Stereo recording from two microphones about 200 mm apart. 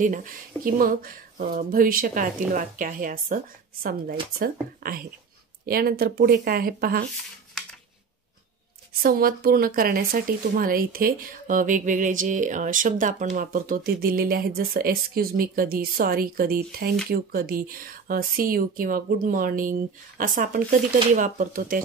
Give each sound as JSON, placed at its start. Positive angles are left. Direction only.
{"t": 0.0, "sound": "speech", "side_deg": -40}
{"t": 9.0, "sound": "speech", "side_deg": -45}